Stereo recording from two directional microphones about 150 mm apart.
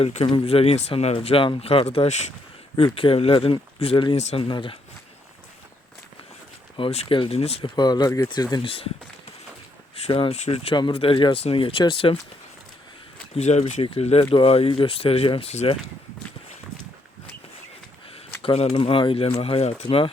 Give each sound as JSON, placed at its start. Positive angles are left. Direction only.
{"t": 0.0, "sound": "speech", "side_deg": 45}
{"t": 2.7, "sound": "speech", "side_deg": 35}
{"t": 4.2, "sound": "speech", "side_deg": 50}
{"t": 4.4, "sound": "speech", "side_deg": 35}
{"t": 6.7, "sound": "speech", "side_deg": 40}
{"t": 7.8, "sound": "speech", "side_deg": 25}
{"t": 9.9, "sound": "speech", "side_deg": 40}
{"t": 13.3, "sound": "speech", "side_deg": 50}
{"t": 18.1, "sound": "speech", "side_deg": 40}